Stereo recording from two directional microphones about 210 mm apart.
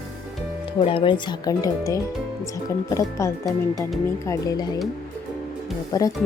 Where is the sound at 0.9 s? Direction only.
25° left (ahead or behind).